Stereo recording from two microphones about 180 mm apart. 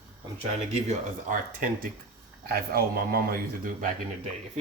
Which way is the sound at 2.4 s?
60° right (ahead or behind).